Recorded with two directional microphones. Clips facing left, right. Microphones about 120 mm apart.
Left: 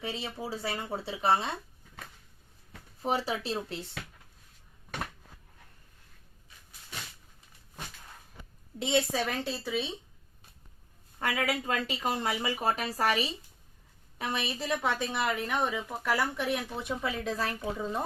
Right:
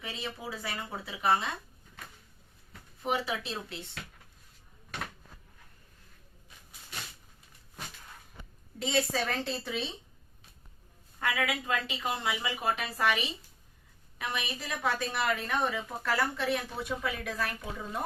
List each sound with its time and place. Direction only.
0.0 s speech: 30° left (ahead or behind)
3.0 s speech: 35° left (ahead or behind)
8.8 s a woman's voice: 20° left (ahead or behind); by 9.9 s 5° left (ahead or behind)
11.2 s a woman's voice: 35° left (ahead or behind)